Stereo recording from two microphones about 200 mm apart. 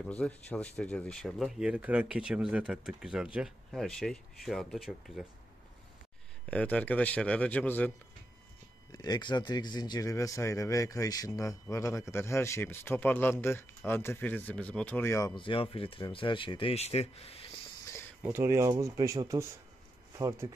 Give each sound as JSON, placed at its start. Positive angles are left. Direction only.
{"t": 0.0, "sound": "speech", "side_deg": 5}
{"t": 6.5, "sound": "speech", "side_deg": 5}
{"t": 8.9, "sound": "speech", "side_deg": 20}
{"t": 18.2, "sound": "speech", "side_deg": -10}